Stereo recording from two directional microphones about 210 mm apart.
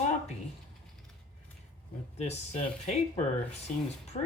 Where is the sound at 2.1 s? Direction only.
30° left (ahead or behind).